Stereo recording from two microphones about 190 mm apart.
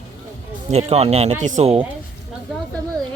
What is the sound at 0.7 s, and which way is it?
Speech, 35° right (ahead or behind).